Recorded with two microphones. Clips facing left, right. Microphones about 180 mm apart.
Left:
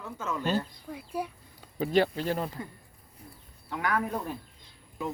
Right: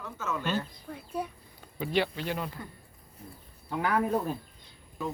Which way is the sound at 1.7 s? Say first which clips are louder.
Left 4 dB; 40° left (ahead or behind).